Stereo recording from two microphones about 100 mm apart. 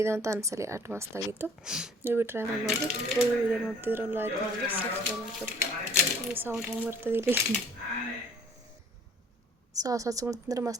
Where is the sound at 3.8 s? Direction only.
20° right (ahead or behind).